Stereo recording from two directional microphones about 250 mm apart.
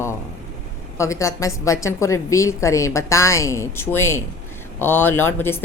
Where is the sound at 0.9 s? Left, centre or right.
Centre.